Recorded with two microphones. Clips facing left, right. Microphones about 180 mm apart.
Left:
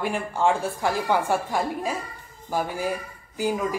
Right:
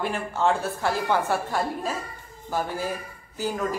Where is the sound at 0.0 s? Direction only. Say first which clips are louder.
Left 1 dB; 10° left (ahead or behind).